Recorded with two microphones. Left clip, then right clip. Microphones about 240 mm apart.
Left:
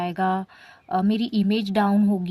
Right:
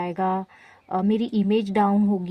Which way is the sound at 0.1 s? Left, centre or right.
Left.